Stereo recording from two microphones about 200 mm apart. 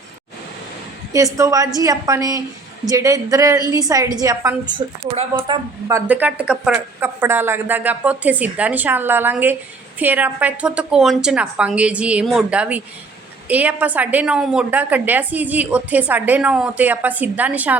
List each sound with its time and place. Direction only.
1.1 s a woman's voice: 15° right (ahead or behind)
5.9 s a woman's voice: 10° right (ahead or behind)